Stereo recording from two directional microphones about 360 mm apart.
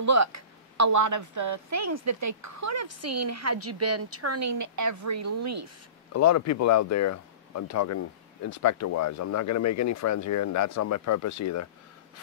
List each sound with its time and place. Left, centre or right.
0.0 s speech: right
6.1 s speech: left